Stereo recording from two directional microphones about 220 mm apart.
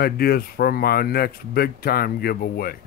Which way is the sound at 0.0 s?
45° left (ahead or behind).